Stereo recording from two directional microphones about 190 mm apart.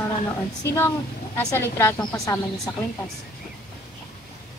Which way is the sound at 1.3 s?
15° left (ahead or behind).